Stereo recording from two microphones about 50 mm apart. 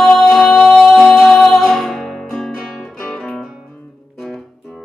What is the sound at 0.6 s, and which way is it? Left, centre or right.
Music, left.